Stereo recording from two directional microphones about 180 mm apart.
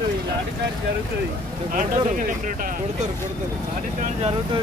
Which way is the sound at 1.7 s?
50° right (ahead or behind).